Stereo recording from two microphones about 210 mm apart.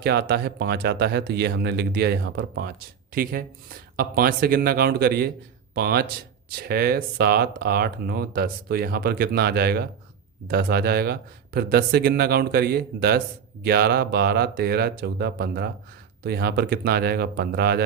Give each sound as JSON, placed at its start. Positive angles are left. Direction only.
{"t": 0.0, "sound": "speech", "side_deg": -50}